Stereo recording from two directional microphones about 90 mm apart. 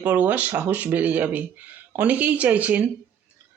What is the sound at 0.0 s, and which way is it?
Speech, 15° right (ahead or behind).